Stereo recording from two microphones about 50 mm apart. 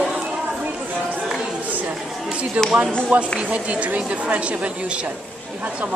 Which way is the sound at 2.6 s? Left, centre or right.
Right.